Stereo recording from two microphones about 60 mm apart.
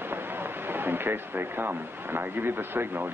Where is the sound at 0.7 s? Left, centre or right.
Right.